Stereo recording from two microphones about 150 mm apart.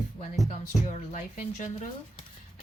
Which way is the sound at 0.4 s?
45° left (ahead or behind).